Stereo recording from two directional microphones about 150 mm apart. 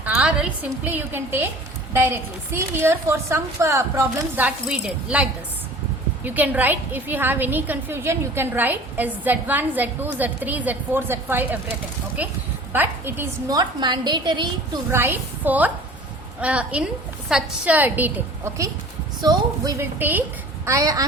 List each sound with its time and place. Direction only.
0.0 s a woman's voice: 10° right (ahead or behind)
13.5 s a woman's voice: 25° right (ahead or behind)
14.8 s a woman's voice: 15° right (ahead or behind)
19.2 s a woman's voice: 25° right (ahead or behind)
20.0 s a woman's voice: 10° right (ahead or behind)
20.7 s a woman's voice: 20° right (ahead or behind)